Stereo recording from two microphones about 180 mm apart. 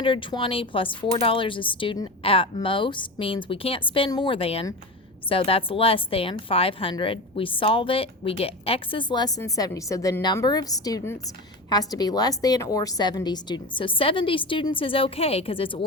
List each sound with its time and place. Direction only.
0.0 s a woman's voice: 30° left (ahead or behind)